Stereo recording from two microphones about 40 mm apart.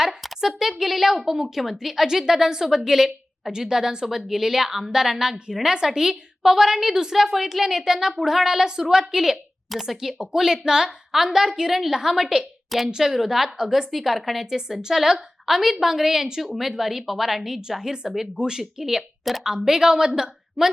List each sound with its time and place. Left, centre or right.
0.2 s a woman's voice: centre
14.8 s a woman's voice: centre